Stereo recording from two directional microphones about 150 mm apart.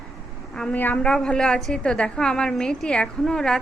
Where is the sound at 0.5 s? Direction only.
10° left (ahead or behind).